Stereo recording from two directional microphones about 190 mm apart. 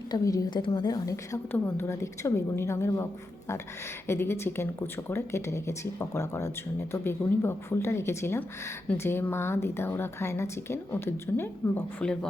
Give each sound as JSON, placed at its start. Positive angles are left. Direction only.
{"t": 0.1, "sound": "speech", "side_deg": 20}